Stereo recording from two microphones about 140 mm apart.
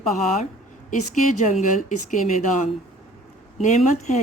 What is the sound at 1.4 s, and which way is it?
Speech, 65° left (ahead or behind).